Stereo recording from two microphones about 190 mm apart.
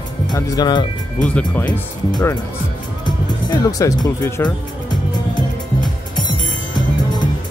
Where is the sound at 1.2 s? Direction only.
5° left (ahead or behind).